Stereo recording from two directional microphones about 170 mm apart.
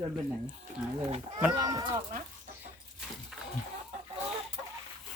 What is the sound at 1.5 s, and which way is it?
Speech, 20° right (ahead or behind).